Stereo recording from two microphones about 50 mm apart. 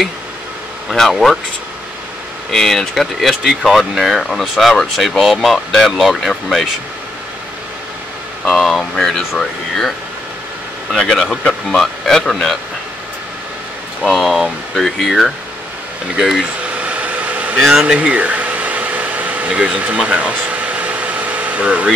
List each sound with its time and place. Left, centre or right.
0.8 s speech: centre
2.5 s speech: centre
8.5 s speech: centre
11.0 s speech: centre
14.0 s speech: centre
16.2 s speech: centre
16.6 s vehicle: right
17.6 s a sound: centre
20.0 s air conditioning: right